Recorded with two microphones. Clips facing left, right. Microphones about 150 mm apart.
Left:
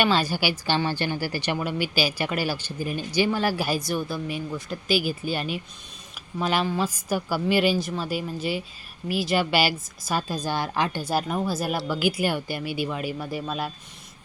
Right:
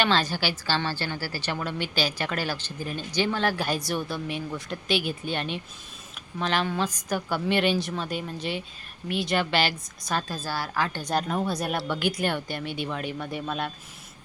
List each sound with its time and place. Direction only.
0.0 s a woman's voice: 10° left (ahead or behind)
11.0 s speech: 5° left (ahead or behind)